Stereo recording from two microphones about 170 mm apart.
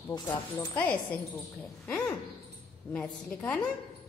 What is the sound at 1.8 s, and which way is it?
Owl, 10° left (ahead or behind).